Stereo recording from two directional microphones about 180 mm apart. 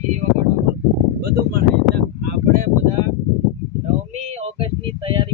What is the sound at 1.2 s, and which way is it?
Speech, 60° right (ahead or behind).